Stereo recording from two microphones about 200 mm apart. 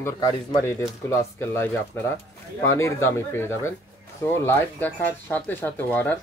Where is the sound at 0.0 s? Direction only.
20° left (ahead or behind).